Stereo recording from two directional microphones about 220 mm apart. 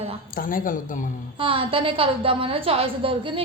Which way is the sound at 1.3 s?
25° right (ahead or behind).